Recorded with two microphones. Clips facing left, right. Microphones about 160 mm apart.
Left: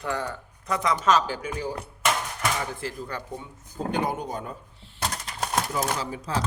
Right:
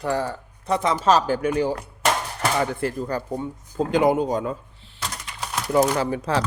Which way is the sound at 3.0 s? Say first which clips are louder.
Right 8 dB; 40° right (ahead or behind).